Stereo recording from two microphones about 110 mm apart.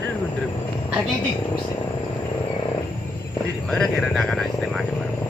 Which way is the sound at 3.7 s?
5° left (ahead or behind).